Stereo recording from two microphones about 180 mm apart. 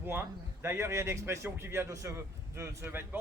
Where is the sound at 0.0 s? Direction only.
10° right (ahead or behind).